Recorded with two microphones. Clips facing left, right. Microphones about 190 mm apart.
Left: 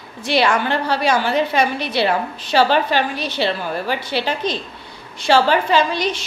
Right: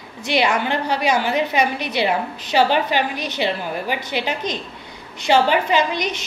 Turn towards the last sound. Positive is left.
turn(degrees=-20)  # may be behind; listen again after turning